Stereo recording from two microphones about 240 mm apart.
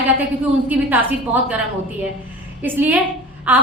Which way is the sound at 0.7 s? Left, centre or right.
Centre.